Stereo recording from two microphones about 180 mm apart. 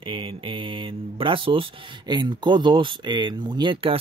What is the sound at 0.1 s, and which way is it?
Speech, 30° right (ahead or behind).